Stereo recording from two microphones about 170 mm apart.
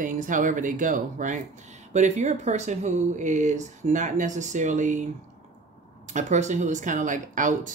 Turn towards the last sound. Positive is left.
turn(degrees=-50)  # may be behind; listen again after turning